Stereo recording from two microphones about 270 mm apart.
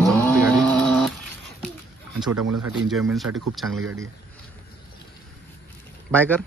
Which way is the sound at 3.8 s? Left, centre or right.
Right.